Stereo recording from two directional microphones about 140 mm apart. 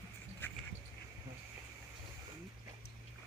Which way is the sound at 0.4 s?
15° left (ahead or behind).